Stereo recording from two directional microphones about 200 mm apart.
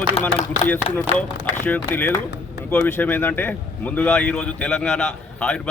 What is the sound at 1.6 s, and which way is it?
A man's voice, 10° left (ahead or behind).